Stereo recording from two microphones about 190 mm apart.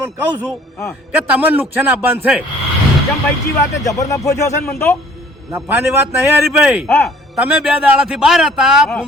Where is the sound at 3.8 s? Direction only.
15° left (ahead or behind).